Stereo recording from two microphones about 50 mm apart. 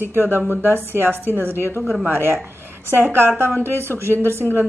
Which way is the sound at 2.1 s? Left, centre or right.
Right.